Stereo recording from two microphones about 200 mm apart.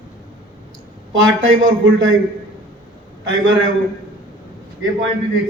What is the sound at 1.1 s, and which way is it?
Speech, 70° right (ahead or behind).